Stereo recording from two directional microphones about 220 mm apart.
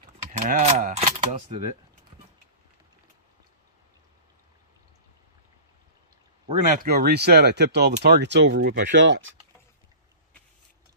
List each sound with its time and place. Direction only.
0.4 s speech: 30° right (ahead or behind)
6.4 s speech: 35° right (ahead or behind)
8.9 s speech: 55° right (ahead or behind)